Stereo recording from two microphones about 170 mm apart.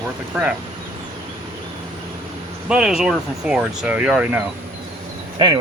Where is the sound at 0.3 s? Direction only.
10° right (ahead or behind).